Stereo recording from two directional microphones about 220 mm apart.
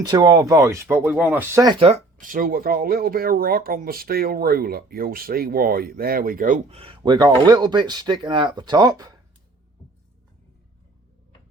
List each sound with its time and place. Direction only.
0.1 s speech: 15° right (ahead or behind)
1.8 s speech: 35° right (ahead or behind)